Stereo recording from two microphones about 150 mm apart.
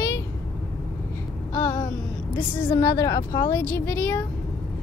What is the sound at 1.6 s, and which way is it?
A woman's voice, 15° left (ahead or behind).